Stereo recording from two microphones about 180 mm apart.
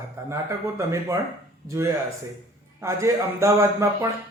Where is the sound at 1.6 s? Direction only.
15° right (ahead or behind).